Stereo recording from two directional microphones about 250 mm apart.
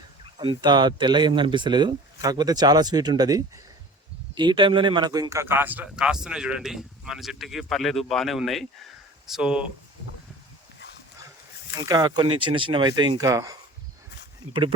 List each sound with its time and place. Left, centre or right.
0.3 s speech: centre
11.7 s speech: centre